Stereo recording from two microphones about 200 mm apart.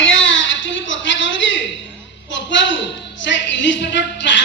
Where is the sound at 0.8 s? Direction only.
65° left (ahead or behind).